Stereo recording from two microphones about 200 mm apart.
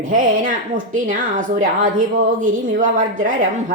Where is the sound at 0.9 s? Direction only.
40° right (ahead or behind).